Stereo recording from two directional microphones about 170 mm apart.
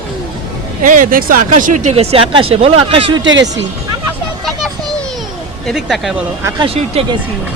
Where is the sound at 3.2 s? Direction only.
90° right.